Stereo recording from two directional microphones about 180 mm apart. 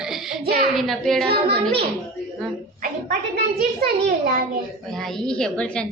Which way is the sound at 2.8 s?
50° right (ahead or behind).